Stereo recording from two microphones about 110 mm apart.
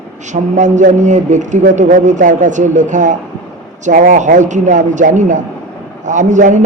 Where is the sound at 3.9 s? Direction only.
90° right.